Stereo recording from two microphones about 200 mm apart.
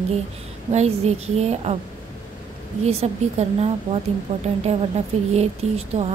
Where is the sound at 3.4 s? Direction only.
35° right (ahead or behind).